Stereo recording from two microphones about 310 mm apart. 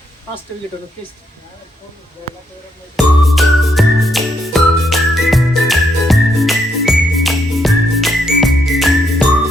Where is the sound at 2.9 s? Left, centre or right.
Centre.